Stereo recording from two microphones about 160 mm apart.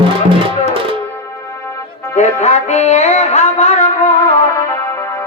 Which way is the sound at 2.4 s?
45° left (ahead or behind).